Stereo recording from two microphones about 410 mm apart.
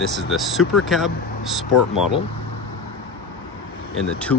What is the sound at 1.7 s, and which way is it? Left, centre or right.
Speech, left.